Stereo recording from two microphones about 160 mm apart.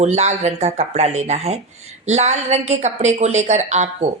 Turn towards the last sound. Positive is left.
turn(degrees=-45)  # may be behind; listen again after turning